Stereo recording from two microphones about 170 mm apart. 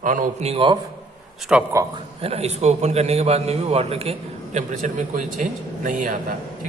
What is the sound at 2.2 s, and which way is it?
Speech, 40° right (ahead or behind).